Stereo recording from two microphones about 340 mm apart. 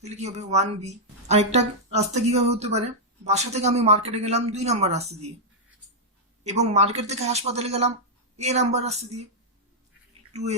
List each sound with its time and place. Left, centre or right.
0.0 s speech: centre
6.4 s speech: centre